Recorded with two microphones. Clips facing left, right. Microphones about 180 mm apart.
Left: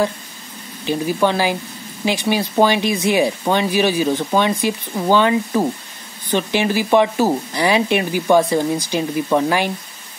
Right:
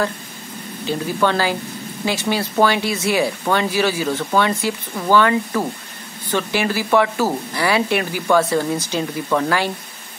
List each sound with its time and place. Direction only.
0.8 s speech: 15° left (ahead or behind)